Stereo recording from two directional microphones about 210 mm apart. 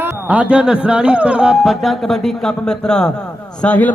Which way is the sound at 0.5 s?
5° right (ahead or behind).